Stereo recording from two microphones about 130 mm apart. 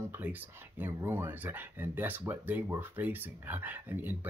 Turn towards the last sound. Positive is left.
turn(degrees=-15)  # may be behind; listen again after turning